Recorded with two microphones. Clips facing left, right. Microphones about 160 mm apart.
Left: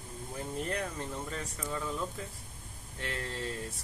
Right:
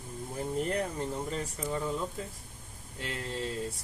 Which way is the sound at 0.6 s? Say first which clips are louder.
Right 4 dB; 25° right (ahead or behind).